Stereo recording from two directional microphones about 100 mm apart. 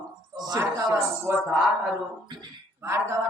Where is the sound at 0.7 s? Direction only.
25° right (ahead or behind).